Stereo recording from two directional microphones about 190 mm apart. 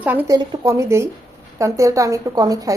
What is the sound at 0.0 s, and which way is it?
Speech, 10° right (ahead or behind).